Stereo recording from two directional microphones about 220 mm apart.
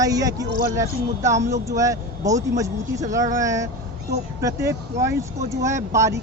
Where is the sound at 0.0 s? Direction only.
15° right (ahead or behind).